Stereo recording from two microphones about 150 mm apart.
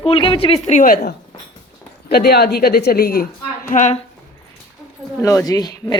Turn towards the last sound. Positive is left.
turn(degrees=25)  # may be behind; listen again after turning